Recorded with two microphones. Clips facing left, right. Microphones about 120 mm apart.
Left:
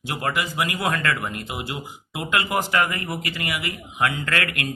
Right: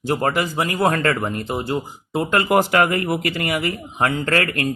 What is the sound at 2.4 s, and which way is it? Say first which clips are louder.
Speech: right 7 dB; 55° right (ahead or behind).